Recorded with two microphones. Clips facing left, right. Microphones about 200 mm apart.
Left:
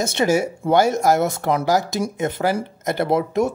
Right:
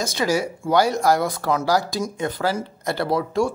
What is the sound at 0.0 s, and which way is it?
Speech, 25° left (ahead or behind).